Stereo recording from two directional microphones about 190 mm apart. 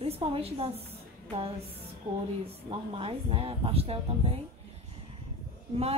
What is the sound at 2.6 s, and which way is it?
Speech, 30° right (ahead or behind).